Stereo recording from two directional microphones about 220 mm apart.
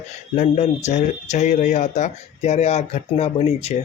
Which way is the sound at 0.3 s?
35° left (ahead or behind).